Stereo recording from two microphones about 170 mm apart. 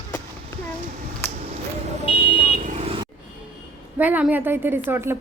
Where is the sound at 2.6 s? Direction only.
45° right (ahead or behind).